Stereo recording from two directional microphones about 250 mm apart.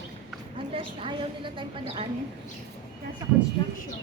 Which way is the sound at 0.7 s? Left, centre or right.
Right.